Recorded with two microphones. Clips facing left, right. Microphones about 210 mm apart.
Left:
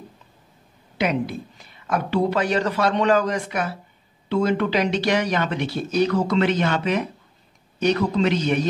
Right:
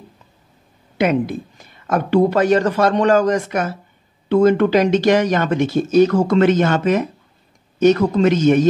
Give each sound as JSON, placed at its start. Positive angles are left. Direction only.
{"t": 0.9, "sound": "a woman's voice", "side_deg": -50}